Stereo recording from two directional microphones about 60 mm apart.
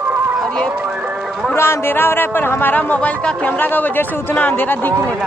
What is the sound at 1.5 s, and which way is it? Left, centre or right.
A man's voice, left.